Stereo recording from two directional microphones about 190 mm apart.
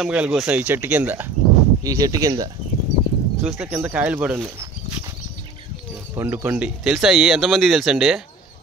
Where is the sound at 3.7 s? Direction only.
10° right (ahead or behind).